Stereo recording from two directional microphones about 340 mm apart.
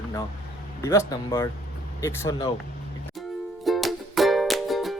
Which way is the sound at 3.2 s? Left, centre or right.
Centre.